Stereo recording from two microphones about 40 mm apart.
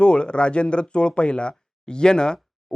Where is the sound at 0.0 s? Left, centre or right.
Left.